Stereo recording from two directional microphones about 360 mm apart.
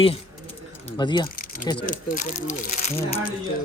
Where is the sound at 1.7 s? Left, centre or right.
Centre.